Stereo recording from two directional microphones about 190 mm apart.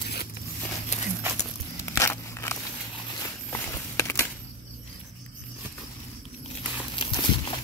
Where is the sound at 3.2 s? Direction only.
15° left (ahead or behind).